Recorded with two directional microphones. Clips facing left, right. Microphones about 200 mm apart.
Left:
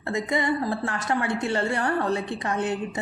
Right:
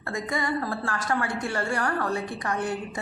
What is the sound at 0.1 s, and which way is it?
A woman's voice, 20° left (ahead or behind).